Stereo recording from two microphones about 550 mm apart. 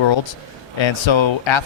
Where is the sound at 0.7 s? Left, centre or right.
Left.